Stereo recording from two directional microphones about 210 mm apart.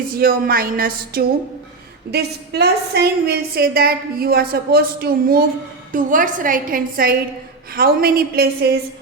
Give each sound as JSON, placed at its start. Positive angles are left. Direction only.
{"t": 0.1, "sound": "a woman's voice", "side_deg": -45}